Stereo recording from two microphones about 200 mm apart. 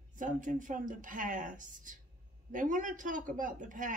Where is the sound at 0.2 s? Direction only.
40° right (ahead or behind).